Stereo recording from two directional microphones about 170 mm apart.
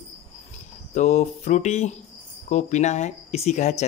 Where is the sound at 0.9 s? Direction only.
45° left (ahead or behind).